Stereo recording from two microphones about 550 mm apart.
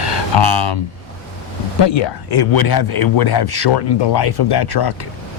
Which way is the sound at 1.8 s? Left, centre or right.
Left.